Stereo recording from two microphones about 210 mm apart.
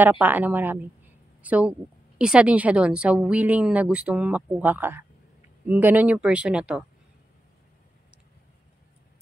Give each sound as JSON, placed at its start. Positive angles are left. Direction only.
{"t": 0.0, "sound": "a woman's voice", "side_deg": -10}